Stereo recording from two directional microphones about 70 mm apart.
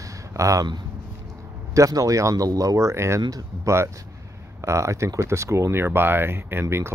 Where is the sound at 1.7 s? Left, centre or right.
Right.